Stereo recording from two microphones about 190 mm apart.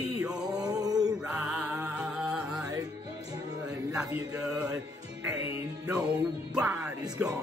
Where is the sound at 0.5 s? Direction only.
20° right (ahead or behind).